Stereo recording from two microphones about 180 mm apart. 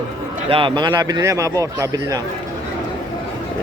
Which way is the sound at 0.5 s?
25° right (ahead or behind).